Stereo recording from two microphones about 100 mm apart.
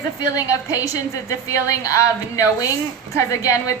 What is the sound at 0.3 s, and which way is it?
A woman's voice, 35° left (ahead or behind).